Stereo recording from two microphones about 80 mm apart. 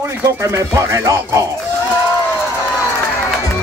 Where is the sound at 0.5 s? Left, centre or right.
Right.